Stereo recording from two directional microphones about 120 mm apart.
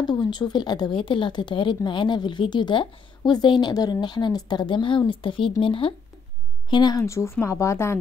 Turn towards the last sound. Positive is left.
turn(degrees=25)  # may be behind; listen again after turning